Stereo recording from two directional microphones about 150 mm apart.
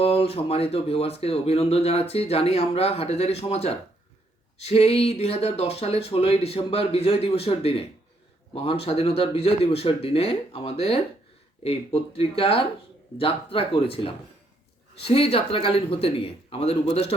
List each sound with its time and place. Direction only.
0.0 s speech: 40° left (ahead or behind)